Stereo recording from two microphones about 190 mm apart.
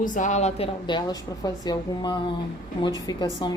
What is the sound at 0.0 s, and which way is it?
Speech, 40° left (ahead or behind).